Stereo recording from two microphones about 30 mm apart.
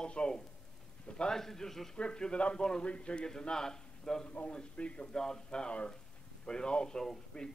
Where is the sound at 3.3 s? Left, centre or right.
Left.